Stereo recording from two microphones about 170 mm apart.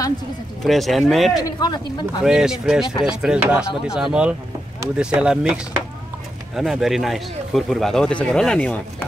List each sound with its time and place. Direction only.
0.7 s speech: centre (ahead or behind)
1.4 s speech: 25° left (ahead or behind)
2.2 s speech: 5° right (ahead or behind)